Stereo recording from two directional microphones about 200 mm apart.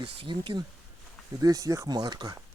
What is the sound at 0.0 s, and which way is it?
Speech, 25° right (ahead or behind).